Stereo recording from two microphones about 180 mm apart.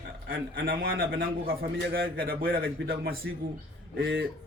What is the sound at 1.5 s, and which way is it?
A man's voice, 60° right (ahead or behind).